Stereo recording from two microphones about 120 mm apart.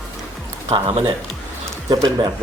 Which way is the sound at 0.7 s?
50° right (ahead or behind).